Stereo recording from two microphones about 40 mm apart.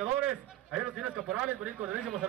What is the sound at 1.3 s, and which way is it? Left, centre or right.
Speech, right.